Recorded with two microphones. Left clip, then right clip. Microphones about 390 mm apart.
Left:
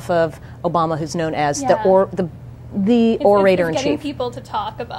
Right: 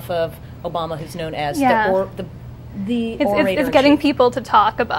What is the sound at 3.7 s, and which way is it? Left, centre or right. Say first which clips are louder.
A woman's voice: right 7 dB; right.